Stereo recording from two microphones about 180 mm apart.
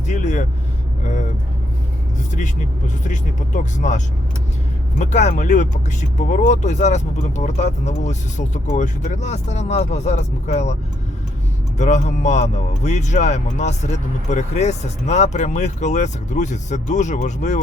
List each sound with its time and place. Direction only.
0.1 s vehicle: 40° left (ahead or behind)
2.3 s speech: 45° left (ahead or behind)
11.8 s speech: 40° left (ahead or behind)